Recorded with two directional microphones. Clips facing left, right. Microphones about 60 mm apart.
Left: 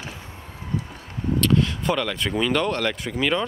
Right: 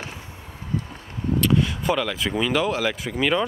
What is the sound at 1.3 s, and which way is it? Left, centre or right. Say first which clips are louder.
Speech: even; centre.